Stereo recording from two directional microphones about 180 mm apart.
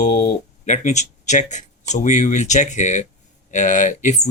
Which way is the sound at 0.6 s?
40° left (ahead or behind).